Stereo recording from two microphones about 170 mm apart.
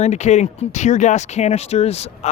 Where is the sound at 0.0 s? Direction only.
40° left (ahead or behind).